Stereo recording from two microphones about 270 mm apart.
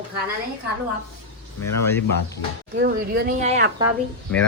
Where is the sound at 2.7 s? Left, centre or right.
Right.